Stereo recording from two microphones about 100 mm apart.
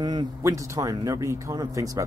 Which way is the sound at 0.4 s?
30° right (ahead or behind).